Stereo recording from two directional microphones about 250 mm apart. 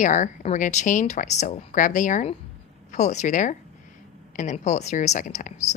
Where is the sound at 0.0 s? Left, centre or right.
Left.